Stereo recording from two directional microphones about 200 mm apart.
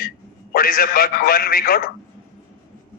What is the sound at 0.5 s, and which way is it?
A man's voice, 50° left (ahead or behind).